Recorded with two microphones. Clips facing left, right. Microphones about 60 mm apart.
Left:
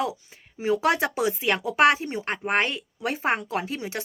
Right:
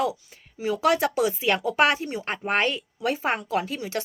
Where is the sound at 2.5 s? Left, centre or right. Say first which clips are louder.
Right 1 dB; centre.